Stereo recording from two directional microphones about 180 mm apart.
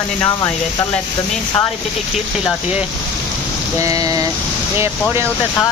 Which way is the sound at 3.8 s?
20° right (ahead or behind).